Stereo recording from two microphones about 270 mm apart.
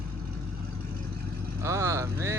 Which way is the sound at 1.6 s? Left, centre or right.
Centre.